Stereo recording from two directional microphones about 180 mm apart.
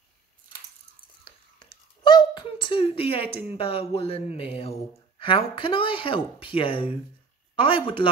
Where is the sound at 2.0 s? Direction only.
25° left (ahead or behind).